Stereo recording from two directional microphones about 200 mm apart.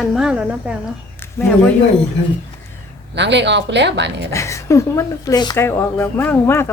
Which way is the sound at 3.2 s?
60° right (ahead or behind).